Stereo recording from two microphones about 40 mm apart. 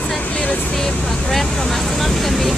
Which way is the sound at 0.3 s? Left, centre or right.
Left.